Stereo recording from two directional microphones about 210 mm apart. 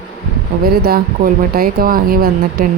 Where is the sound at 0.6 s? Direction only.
45° right (ahead or behind).